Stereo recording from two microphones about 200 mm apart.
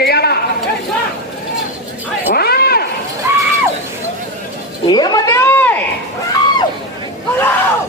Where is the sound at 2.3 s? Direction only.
50° left (ahead or behind).